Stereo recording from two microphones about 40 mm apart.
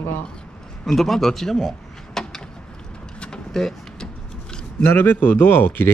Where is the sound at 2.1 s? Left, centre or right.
Centre.